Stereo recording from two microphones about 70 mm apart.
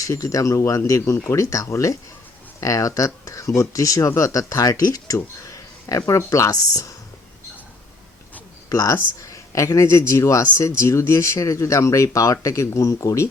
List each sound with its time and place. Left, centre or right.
0.0 s speech: left
8.7 s speech: left